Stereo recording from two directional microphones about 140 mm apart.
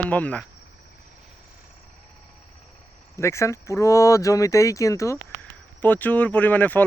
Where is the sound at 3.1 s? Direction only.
20° left (ahead or behind).